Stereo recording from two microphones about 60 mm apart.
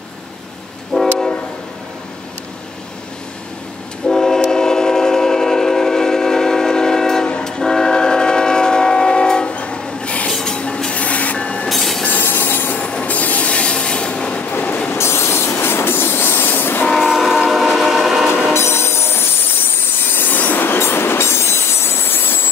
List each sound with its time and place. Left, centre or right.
0.9 s train: centre
4.1 s train: centre
11.7 s train: centre
12.0 s train: left
12.8 s train: left
14.5 s train: left
14.9 s train: left
17.0 s train: centre
18.5 s a sound: left
20.1 s train: left